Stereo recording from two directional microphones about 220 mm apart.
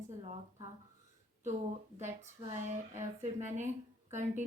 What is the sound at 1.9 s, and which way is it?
Speech, 30° right (ahead or behind).